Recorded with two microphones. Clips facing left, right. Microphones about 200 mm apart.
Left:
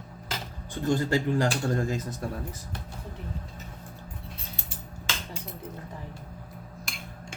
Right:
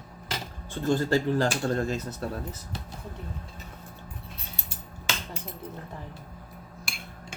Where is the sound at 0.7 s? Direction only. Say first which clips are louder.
Right 1 dB; 15° left (ahead or behind).